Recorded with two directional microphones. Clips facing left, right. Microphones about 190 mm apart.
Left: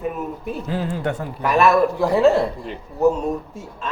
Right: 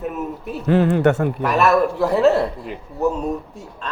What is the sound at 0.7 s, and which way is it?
Speech, 65° right (ahead or behind).